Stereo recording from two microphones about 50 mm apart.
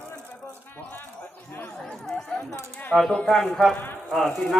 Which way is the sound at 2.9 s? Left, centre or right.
Centre.